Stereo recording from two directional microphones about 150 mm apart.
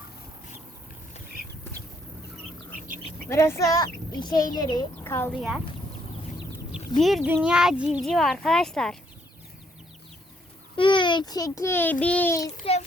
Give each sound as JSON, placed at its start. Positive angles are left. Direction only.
{"t": 3.2, "sound": "speech", "side_deg": 20}
{"t": 5.3, "sound": "speech", "side_deg": -5}
{"t": 7.0, "sound": "speech", "side_deg": 0}
{"t": 10.8, "sound": "a child's voice", "side_deg": 35}
{"t": 12.6, "sound": "a child's voice", "side_deg": 40}